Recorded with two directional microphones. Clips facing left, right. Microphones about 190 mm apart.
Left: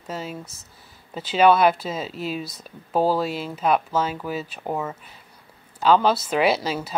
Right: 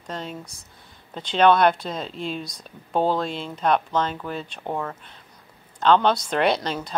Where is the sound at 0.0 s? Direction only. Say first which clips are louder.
Left 1 dB; 5° left (ahead or behind).